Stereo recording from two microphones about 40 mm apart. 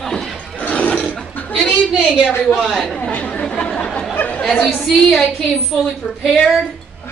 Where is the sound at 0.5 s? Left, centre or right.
Left.